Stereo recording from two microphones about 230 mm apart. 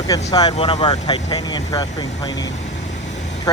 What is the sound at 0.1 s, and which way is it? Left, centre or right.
Speech, centre.